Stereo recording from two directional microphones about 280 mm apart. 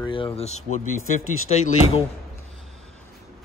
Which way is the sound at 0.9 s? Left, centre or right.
Left.